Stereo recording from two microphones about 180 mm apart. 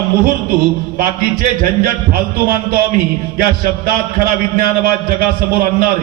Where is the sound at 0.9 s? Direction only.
55° right (ahead or behind).